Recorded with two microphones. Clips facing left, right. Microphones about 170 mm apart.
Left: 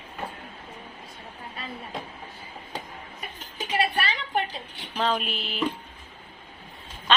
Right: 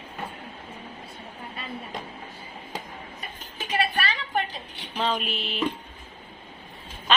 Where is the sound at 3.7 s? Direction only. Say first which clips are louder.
Even; 25° left (ahead or behind).